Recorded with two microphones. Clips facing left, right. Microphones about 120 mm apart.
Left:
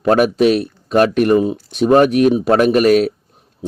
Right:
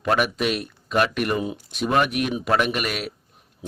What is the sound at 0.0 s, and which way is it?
A man's voice, 35° left (ahead or behind).